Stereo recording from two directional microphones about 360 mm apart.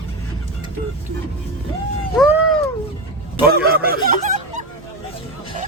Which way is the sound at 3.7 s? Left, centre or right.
Right.